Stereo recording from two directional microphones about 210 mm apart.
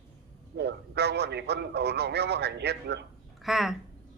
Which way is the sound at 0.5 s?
55° right (ahead or behind).